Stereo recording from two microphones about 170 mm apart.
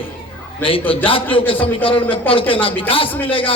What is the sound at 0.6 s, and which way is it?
Speech, 10° left (ahead or behind).